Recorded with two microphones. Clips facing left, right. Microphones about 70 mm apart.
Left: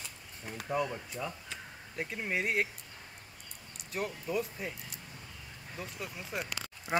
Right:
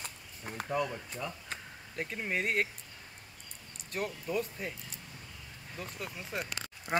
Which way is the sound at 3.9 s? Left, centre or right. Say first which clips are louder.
Even; centre.